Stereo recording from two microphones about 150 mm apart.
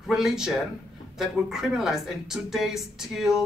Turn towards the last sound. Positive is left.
turn(degrees=-5)  # may be behind; listen again after turning